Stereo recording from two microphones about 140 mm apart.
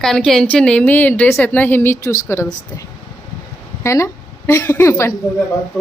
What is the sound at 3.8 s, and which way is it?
A woman's voice, 20° left (ahead or behind).